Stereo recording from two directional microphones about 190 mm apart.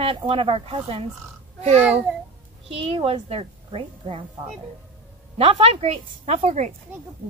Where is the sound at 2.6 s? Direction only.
30° right (ahead or behind).